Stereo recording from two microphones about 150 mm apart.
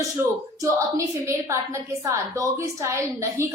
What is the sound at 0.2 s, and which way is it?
A woman's voice, 20° right (ahead or behind).